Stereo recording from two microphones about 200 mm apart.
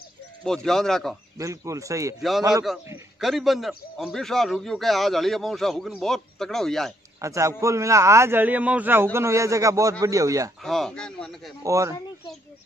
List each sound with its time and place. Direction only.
0.4 s a man's voice: centre (ahead or behind)
1.4 s a man's voice: 15° right (ahead or behind)
2.7 s a man's voice: centre (ahead or behind)
7.2 s a man's voice: 15° right (ahead or behind)
10.6 s a man's voice: centre (ahead or behind)
11.6 s a man's voice: 15° right (ahead or behind)